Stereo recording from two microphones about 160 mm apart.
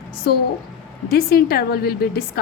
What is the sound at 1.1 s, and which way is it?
A woman's voice, 70° left (ahead or behind).